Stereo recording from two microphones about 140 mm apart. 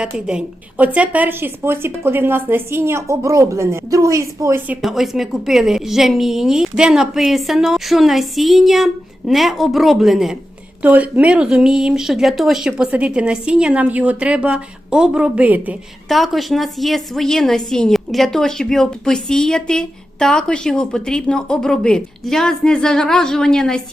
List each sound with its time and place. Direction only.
0.0 s speech: 5° right (ahead or behind); by 4.6 s 20° right (ahead or behind)
4.8 s a woman's voice: centre (ahead or behind)
16.0 s a woman's voice: centre (ahead or behind)